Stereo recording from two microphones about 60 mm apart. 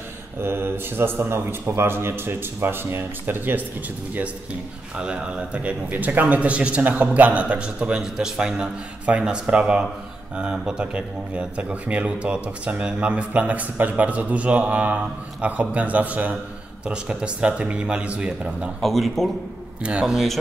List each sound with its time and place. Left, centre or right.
0.4 s a man's voice: right
4.9 s speech: centre
18.8 s speech: centre
19.8 s speech: centre
20.1 s speech: centre